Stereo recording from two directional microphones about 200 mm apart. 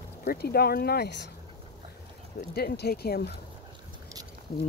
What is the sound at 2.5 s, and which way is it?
Speech, 50° left (ahead or behind).